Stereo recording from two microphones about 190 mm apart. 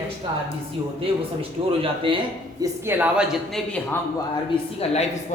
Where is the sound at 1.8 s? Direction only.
25° right (ahead or behind).